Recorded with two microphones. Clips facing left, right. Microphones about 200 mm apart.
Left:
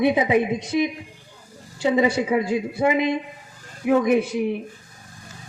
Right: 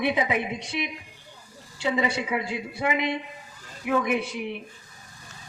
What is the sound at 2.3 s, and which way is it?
A woman's voice, 45° left (ahead or behind).